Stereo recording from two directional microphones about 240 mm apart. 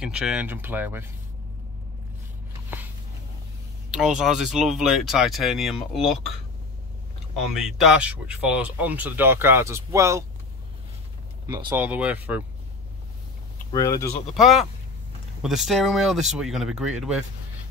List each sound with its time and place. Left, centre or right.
0.0 s speech: centre
3.9 s speech: centre
7.6 s speech: centre
11.4 s speech: centre
13.7 s speech: centre
14.3 s speech: centre